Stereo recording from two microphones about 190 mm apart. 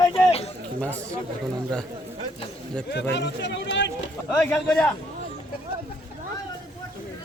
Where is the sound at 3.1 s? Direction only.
70° left (ahead or behind).